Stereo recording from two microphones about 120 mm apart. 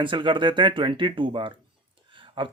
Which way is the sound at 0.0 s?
45° right (ahead or behind).